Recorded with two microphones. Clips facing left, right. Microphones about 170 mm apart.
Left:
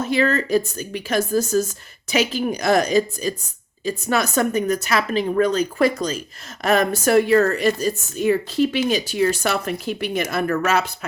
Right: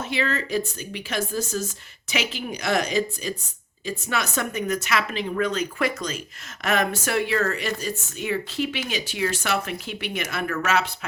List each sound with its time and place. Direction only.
0.0 s speech: 40° left (ahead or behind)